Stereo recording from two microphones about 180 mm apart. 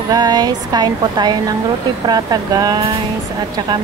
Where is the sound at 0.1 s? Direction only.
20° right (ahead or behind).